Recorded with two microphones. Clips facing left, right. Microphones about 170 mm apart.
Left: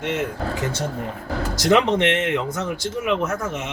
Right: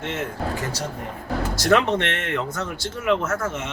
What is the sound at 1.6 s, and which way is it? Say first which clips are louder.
Speech: left 3 dB; 15° left (ahead or behind).